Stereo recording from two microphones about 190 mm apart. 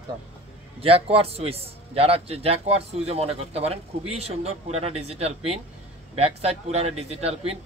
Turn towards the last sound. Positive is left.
turn(degrees=-30)  # may be behind; listen again after turning